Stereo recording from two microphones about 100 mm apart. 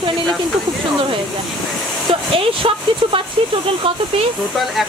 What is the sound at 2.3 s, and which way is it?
Speech, 65° right (ahead or behind).